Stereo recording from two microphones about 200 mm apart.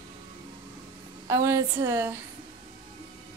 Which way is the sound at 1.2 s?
15° right (ahead or behind).